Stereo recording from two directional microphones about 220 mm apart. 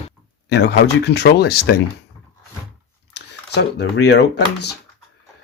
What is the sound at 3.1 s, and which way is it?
Speech, 50° left (ahead or behind).